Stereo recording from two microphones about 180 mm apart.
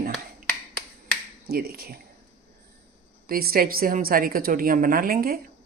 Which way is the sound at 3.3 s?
55° right (ahead or behind).